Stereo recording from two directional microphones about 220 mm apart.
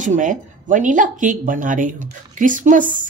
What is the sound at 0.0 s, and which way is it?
Speech, 35° right (ahead or behind).